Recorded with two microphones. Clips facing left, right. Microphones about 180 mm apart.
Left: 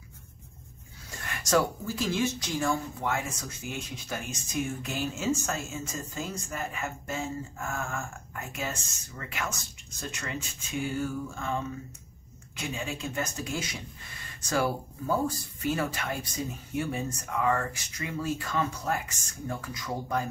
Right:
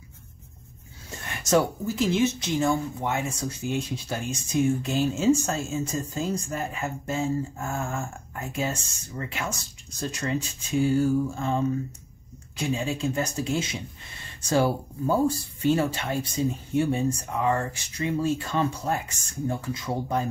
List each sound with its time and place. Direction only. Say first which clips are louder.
1.2 s speech: right 3 dB; 25° right (ahead or behind)